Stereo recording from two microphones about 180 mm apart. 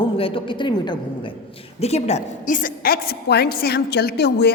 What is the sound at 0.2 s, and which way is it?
A woman's voice, 30° left (ahead or behind).